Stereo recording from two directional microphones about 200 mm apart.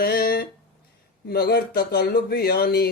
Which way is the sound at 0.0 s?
50° left (ahead or behind).